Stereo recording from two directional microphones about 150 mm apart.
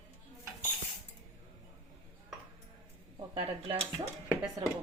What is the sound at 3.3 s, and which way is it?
Speech, 35° right (ahead or behind).